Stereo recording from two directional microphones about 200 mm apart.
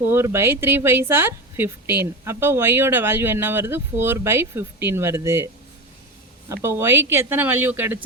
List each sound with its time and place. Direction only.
0.0 s a woman's voice: 10° right (ahead or behind)
6.5 s a woman's voice: 15° right (ahead or behind)